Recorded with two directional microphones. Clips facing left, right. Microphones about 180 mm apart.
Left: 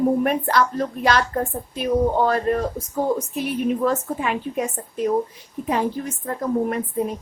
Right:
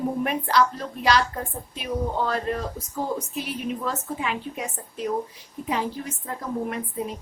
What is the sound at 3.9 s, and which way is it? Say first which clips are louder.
Speech: left 6 dB; 50° left (ahead or behind).